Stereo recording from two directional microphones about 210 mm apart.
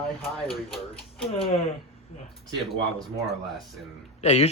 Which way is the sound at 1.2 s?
25° left (ahead or behind).